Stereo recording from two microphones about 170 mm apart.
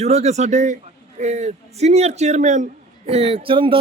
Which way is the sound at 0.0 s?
40° right (ahead or behind).